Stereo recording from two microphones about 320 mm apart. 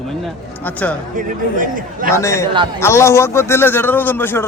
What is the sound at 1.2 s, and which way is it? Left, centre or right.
Speech, right.